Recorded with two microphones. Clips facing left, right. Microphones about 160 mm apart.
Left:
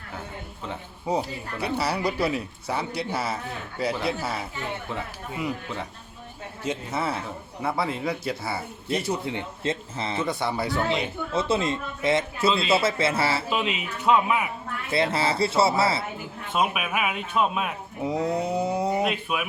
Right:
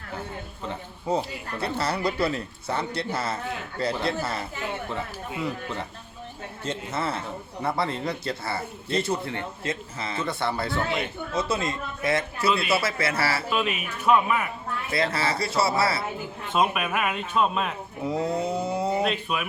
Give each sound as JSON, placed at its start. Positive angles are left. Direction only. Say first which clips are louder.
{"t": 0.7, "sound": "speech", "louder": "even", "side_deg": 10}
{"t": 6.7, "sound": "speech", "louder": "left 1 dB", "side_deg": 10}
{"t": 9.6, "sound": "speech", "louder": "left 5 dB", "side_deg": 30}
{"t": 10.2, "sound": "speech", "louder": "even", "side_deg": 15}
{"t": 11.3, "sound": "speech", "louder": "left 3 dB", "side_deg": 25}
{"t": 15.1, "sound": "speech", "louder": "left 3 dB", "side_deg": 25}
{"t": 16.6, "sound": "speech", "louder": "right 1 dB", "side_deg": 5}